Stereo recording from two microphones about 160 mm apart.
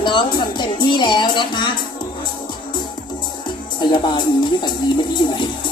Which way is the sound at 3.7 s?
30° left (ahead or behind).